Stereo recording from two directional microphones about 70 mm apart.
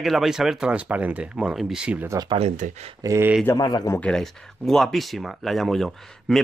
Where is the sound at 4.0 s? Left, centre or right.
Centre.